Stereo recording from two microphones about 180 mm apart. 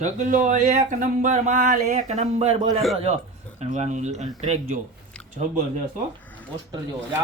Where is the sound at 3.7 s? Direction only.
40° right (ahead or behind).